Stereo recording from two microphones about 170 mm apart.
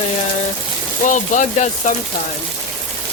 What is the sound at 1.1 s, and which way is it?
Speech, 50° left (ahead or behind).